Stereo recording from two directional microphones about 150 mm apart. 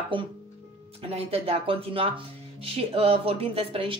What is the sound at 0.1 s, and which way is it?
A woman's voice, 35° right (ahead or behind).